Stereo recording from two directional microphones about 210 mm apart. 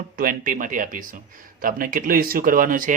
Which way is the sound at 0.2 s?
40° right (ahead or behind).